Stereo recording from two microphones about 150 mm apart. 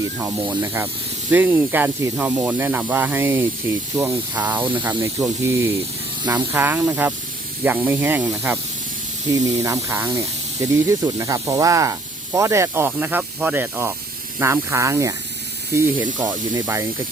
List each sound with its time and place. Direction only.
0.2 s speech: 10° right (ahead or behind)
9.6 s speech: 20° right (ahead or behind)